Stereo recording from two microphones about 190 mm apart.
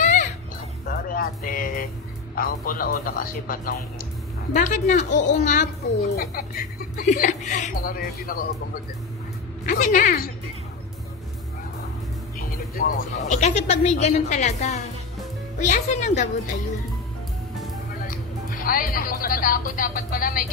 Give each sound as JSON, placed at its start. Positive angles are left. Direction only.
{"t": 0.0, "sound": "children playing", "side_deg": 40}
{"t": 0.8, "sound": "music", "side_deg": 50}
{"t": 2.3, "sound": "speech", "side_deg": 50}
{"t": 12.7, "sound": "speech", "side_deg": 45}
{"t": 18.0, "sound": "speech", "side_deg": 50}